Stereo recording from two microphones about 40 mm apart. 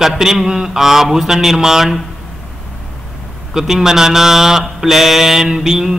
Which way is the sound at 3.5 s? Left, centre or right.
Centre.